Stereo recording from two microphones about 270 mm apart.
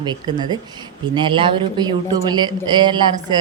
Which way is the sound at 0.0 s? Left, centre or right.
Centre.